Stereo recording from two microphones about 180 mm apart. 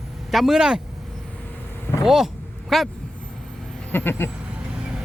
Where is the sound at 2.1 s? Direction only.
Centre (ahead or behind).